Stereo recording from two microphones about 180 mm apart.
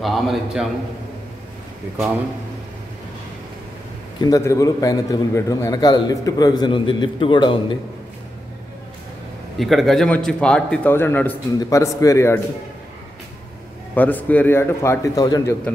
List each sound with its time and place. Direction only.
0.0 s a man's voice: centre (ahead or behind)
4.2 s a man's voice: 20° left (ahead or behind)
9.6 s speech: centre (ahead or behind); by 12.4 s 15° left (ahead or behind)
13.9 s speech: 10° left (ahead or behind)